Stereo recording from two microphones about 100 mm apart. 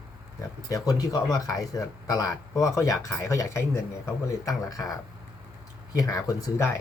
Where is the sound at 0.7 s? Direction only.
35° left (ahead or behind).